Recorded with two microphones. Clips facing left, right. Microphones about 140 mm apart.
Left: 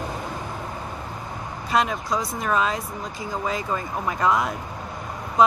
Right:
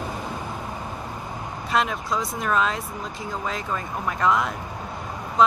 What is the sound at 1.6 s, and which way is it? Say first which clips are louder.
Speech: left 1 dB; centre (ahead or behind).